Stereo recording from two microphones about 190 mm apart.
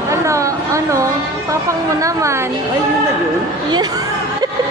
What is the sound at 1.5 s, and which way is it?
Speech, 15° right (ahead or behind).